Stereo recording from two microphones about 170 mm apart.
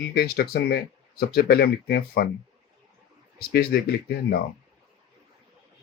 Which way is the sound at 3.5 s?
65° left (ahead or behind).